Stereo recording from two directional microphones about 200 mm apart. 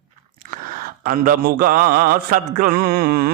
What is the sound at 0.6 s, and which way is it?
Mantra, 45° right (ahead or behind).